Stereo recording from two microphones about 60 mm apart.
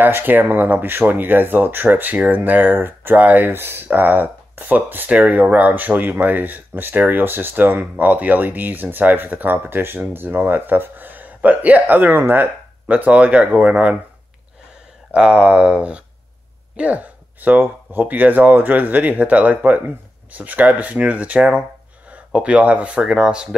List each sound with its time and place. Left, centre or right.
0.0 s speech: right
15.1 s speech: centre